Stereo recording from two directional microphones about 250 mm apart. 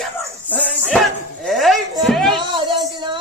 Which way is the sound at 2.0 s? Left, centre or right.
Centre.